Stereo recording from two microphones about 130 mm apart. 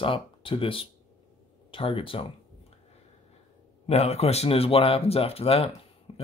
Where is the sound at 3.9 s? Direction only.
55° left (ahead or behind).